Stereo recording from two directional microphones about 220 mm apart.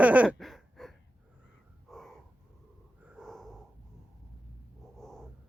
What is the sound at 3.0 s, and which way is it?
Snort, 5° right (ahead or behind).